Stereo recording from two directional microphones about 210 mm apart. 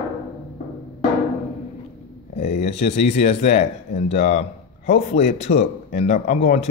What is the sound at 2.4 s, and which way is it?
Speech, 30° left (ahead or behind).